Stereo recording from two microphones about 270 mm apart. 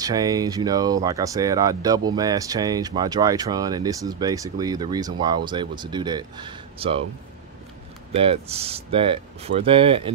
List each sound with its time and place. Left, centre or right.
0.0 s speech: centre
8.1 s speech: right